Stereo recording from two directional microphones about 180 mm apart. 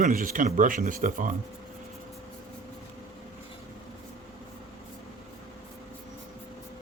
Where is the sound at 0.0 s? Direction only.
50° right (ahead or behind).